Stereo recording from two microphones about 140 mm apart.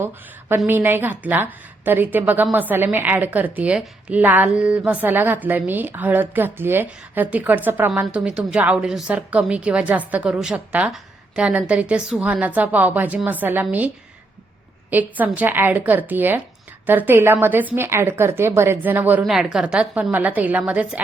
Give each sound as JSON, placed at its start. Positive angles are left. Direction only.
{"t": 0.0, "sound": "a woman's voice", "side_deg": -15}